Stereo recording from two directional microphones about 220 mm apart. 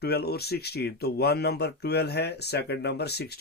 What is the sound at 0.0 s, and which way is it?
Speech, 45° left (ahead or behind).